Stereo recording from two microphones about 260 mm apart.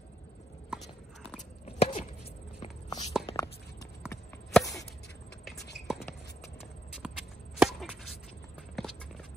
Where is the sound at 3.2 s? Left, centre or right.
Centre.